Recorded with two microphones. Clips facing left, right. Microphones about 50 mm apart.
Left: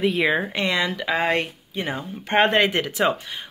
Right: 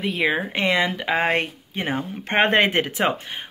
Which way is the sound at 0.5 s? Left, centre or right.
Right.